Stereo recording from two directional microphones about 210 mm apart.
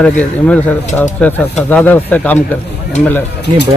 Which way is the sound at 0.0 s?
5° left (ahead or behind).